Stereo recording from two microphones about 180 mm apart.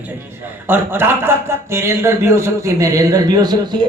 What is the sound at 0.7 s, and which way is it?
A man's voice, 10° right (ahead or behind).